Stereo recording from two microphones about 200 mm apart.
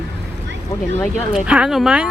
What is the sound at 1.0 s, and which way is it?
Speech, 5° right (ahead or behind).